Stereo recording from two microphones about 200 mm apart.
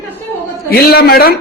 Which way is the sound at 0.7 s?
50° left (ahead or behind).